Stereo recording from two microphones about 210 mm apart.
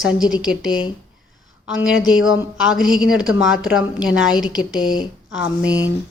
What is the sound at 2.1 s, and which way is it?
Speech, 70° left (ahead or behind).